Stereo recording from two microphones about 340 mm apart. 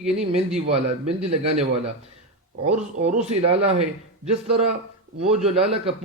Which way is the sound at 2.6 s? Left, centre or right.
Centre.